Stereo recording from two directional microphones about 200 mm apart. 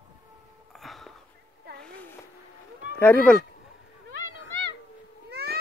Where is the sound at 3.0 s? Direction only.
10° left (ahead or behind).